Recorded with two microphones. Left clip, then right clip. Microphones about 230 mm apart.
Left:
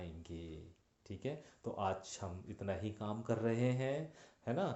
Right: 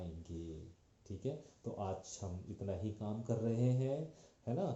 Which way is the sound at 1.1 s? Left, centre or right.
Left.